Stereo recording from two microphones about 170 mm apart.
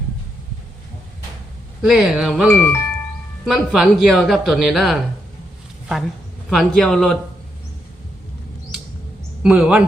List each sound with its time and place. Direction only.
1.8 s speech: 5° right (ahead or behind)
2.5 s speech: 10° left (ahead or behind)
3.4 s speech: centre (ahead or behind)
6.5 s speech: centre (ahead or behind)
9.4 s speech: 5° right (ahead or behind)